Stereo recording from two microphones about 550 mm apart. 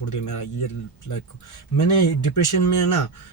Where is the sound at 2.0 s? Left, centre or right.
Left.